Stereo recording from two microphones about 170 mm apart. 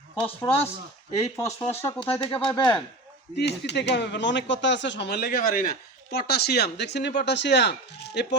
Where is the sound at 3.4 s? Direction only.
85° left; by 5.7 s 55° left (ahead or behind).